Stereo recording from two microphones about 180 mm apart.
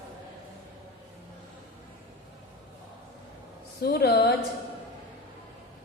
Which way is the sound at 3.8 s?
60° left (ahead or behind).